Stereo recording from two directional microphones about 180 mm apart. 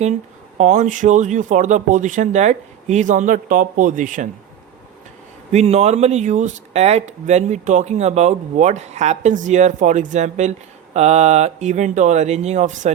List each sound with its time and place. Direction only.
0.6 s speech: 40° right (ahead or behind)
5.5 s speech: 35° right (ahead or behind)